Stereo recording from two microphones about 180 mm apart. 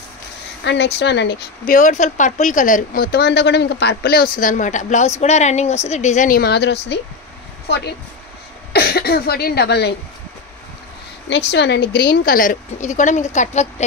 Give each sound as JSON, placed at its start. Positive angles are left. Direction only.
{"t": 0.7, "sound": "a woman's voice", "side_deg": 70}
{"t": 11.2, "sound": "a woman's voice", "side_deg": 75}